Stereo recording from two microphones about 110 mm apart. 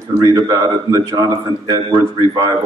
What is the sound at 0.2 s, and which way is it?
A man's voice, 30° right (ahead or behind).